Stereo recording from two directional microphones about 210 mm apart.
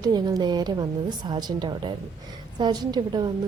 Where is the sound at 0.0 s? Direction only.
20° right (ahead or behind).